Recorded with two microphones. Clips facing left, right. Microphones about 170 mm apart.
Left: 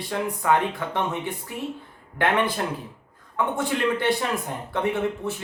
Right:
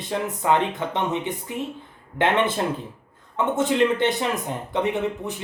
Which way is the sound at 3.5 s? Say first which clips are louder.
Right 6 dB; 20° right (ahead or behind).